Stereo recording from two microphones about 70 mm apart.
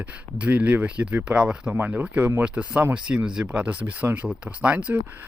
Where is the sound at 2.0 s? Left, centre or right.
Right.